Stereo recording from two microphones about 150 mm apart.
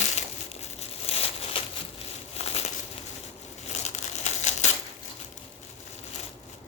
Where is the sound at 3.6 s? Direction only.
50° left (ahead or behind).